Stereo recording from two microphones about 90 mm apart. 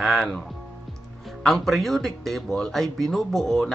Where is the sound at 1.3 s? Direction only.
Centre (ahead or behind).